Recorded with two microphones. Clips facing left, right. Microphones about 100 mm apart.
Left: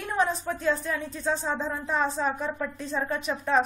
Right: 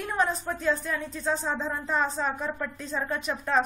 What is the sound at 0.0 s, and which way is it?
Speech, centre (ahead or behind).